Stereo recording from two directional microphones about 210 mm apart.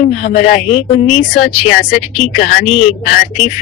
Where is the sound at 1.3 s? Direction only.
45° left (ahead or behind).